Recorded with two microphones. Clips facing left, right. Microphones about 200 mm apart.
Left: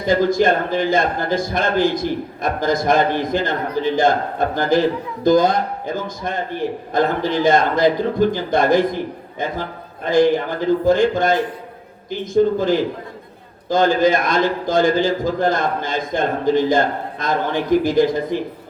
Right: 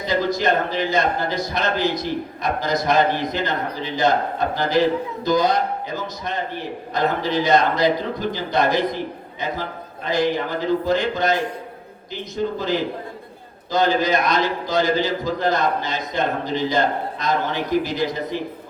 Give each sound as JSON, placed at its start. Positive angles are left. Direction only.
{"t": 0.0, "sound": "a man's voice", "side_deg": 50}